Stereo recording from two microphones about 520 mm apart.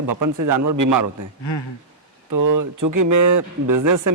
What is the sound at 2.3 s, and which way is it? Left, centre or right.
A man's voice, right.